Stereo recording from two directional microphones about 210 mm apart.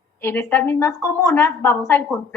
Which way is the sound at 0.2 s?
10° left (ahead or behind).